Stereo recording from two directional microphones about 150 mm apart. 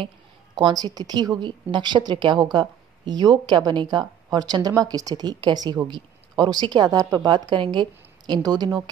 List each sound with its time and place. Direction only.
0.6 s speech: 30° right (ahead or behind)